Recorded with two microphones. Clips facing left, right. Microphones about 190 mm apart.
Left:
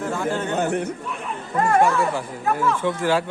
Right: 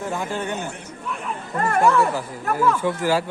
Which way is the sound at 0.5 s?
60° left (ahead or behind).